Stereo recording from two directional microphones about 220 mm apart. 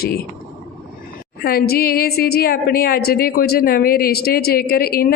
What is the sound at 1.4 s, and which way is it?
A woman's voice, 45° left (ahead or behind).